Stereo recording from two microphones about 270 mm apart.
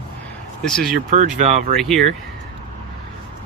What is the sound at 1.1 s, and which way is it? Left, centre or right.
Speech, right.